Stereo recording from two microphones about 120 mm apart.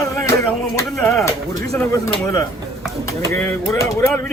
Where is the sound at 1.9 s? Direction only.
25° left (ahead or behind).